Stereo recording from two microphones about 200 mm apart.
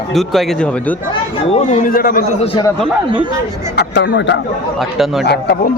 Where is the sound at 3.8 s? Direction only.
55° left (ahead or behind).